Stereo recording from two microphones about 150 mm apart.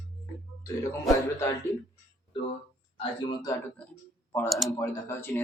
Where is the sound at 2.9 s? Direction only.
30° left (ahead or behind).